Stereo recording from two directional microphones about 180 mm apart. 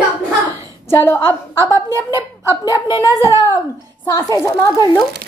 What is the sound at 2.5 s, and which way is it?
A woman's voice, 20° left (ahead or behind).